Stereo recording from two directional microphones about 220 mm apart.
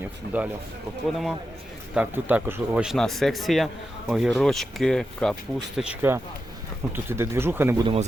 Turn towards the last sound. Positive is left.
turn(degrees=-10)  # may be behind; listen again after turning